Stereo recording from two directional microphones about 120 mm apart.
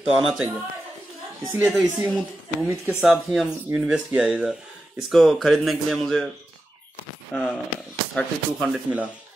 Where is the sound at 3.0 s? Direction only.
Centre (ahead or behind).